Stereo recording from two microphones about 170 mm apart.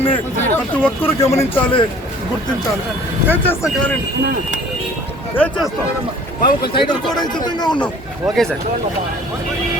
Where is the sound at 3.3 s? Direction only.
10° left (ahead or behind).